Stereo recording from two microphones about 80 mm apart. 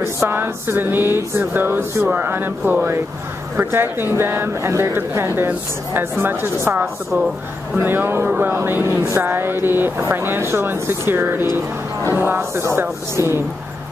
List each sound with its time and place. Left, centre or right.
0.0 s speech: right